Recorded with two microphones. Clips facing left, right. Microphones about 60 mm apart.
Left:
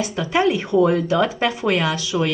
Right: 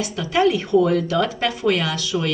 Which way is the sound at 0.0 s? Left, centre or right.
Left.